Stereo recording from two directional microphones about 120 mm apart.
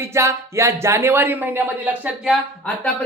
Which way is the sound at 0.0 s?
25° right (ahead or behind).